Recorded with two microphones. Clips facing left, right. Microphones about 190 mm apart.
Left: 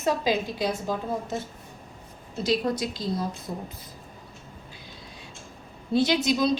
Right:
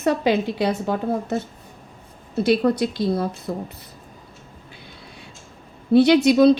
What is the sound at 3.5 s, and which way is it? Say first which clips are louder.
Speech: right 7 dB; 85° right.